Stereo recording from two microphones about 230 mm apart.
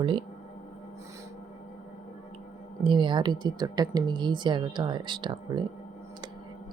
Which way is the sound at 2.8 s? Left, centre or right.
Right.